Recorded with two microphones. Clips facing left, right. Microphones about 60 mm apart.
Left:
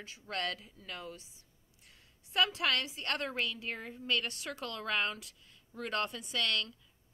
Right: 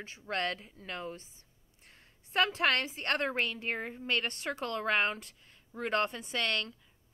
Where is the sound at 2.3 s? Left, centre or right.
Right.